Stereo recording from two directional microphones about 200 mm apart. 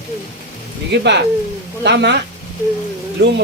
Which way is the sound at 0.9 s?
60° right (ahead or behind).